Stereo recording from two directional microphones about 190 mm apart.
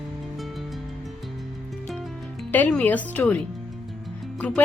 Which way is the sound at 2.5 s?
5° left (ahead or behind).